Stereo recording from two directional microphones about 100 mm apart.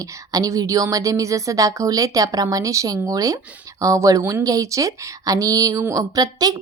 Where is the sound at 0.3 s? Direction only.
35° right (ahead or behind).